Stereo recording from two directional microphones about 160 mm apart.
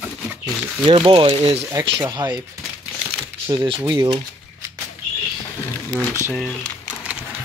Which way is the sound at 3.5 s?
30° right (ahead or behind).